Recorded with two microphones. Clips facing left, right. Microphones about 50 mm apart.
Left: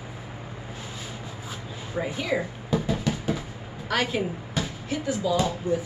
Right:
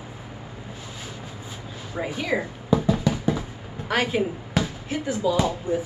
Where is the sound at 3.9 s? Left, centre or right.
Centre.